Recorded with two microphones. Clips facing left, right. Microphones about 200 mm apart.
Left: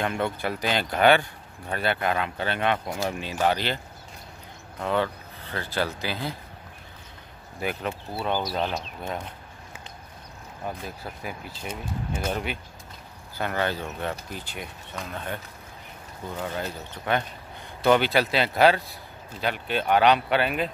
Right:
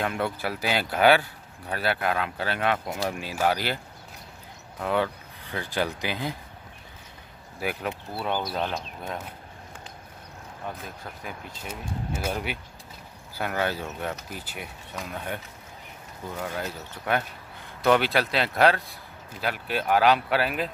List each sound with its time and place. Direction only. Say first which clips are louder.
0.0 s speech: left 1 dB; 5° right (ahead or behind)
7.6 s speech: left 1 dB; 5° right (ahead or behind)
10.8 s speech: left 3 dB; 5° left (ahead or behind)
11.6 s speech: left 1 dB; 5° right (ahead or behind)